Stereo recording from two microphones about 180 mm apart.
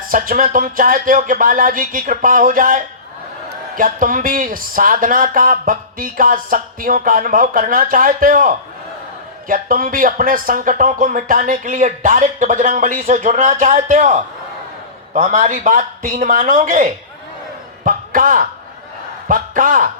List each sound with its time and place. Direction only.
0.1 s a man's voice: 50° right (ahead or behind)